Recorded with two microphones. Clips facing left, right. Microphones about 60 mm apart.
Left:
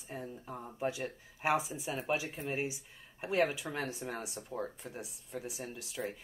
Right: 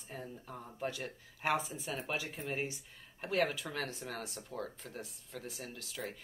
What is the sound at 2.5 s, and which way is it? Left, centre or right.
Speech, centre.